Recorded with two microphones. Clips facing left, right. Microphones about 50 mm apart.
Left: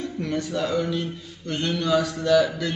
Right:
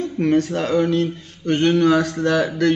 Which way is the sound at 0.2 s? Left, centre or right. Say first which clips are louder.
Right 8 dB; right.